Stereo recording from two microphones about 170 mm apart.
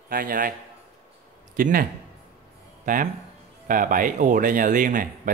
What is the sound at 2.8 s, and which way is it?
Music, 55° right (ahead or behind).